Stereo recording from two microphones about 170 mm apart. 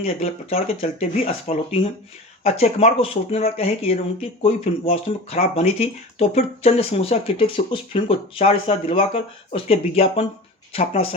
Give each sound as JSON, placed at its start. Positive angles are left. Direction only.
{"t": 0.0, "sound": "speech", "side_deg": 35}